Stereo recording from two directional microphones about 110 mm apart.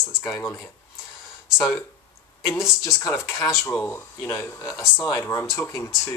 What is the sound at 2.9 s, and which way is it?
Speech, 30° left (ahead or behind).